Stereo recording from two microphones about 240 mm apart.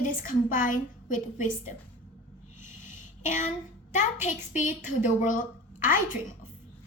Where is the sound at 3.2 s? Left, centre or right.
Left.